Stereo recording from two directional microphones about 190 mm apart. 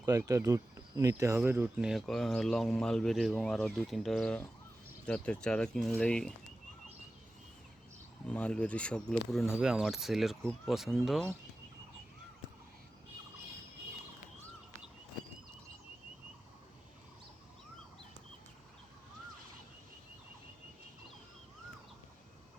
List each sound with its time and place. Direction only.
0.0 s speech: 15° right (ahead or behind); by 6.3 s 5° left (ahead or behind)
8.3 s speech: 5° left (ahead or behind)